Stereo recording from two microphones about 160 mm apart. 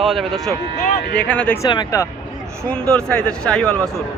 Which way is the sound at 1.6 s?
25° left (ahead or behind).